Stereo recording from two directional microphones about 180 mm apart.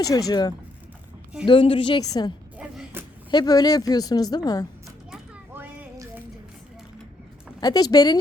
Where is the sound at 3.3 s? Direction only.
20° left (ahead or behind).